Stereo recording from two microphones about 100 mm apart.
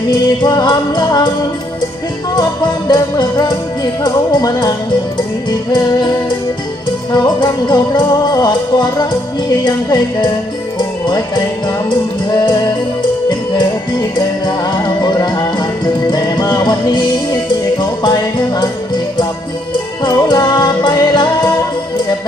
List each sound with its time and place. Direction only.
0.1 s music: 45° left (ahead or behind)
2.3 s music: 45° left (ahead or behind)
20.1 s music: 45° left (ahead or behind)